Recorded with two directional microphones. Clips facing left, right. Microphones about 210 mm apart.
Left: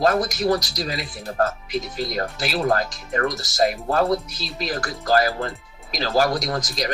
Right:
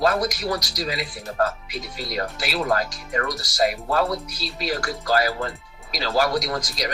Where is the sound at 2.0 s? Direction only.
45° left (ahead or behind).